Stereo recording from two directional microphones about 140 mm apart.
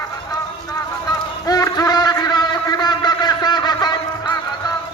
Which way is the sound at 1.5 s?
25° left (ahead or behind).